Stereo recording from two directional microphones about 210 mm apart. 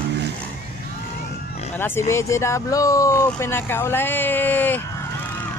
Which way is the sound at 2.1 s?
15° left (ahead or behind).